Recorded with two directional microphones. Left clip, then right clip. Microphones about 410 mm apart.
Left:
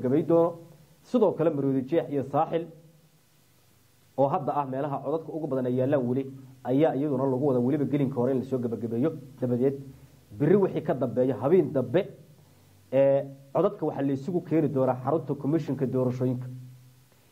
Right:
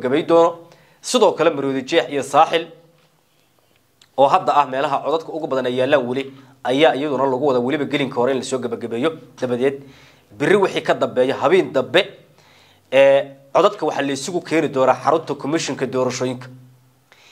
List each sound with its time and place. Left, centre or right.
0.0 s a man's voice: centre
4.1 s a man's voice: centre